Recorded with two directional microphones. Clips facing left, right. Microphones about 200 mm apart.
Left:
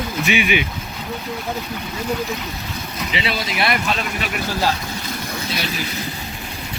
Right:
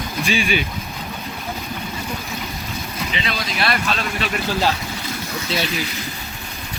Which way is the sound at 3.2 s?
20° left (ahead or behind).